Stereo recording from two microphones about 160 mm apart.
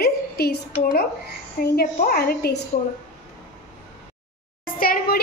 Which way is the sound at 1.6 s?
70° left (ahead or behind).